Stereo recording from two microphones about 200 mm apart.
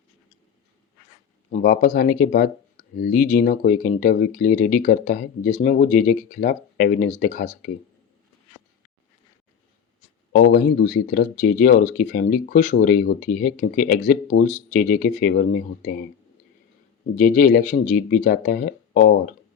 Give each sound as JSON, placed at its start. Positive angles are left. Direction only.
{"t": 1.5, "sound": "speech", "side_deg": 45}
{"t": 10.3, "sound": "speech", "side_deg": 50}
{"t": 17.2, "sound": "speech", "side_deg": 45}